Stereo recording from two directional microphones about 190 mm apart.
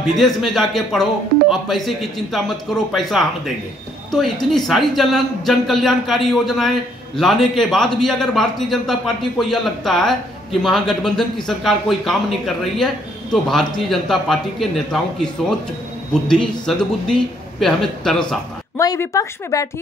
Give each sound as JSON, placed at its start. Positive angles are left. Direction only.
{"t": 0.1, "sound": "a man's voice", "side_deg": 0}
{"t": 18.8, "sound": "a woman's voice", "side_deg": 15}